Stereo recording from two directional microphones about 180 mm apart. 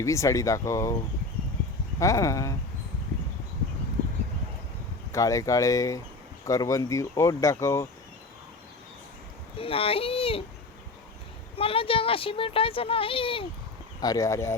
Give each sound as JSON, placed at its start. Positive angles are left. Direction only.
{"t": 0.0, "sound": "speech", "side_deg": 15}
{"t": 2.0, "sound": "speech", "side_deg": 15}
{"t": 5.1, "sound": "speech", "side_deg": 20}
{"t": 9.6, "sound": "speech", "side_deg": 30}
{"t": 11.5, "sound": "speech", "side_deg": 30}
{"t": 14.0, "sound": "speech", "side_deg": 20}